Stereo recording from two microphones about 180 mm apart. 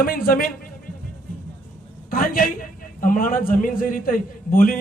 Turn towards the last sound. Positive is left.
turn(degrees=50)  # may be behind; listen again after turning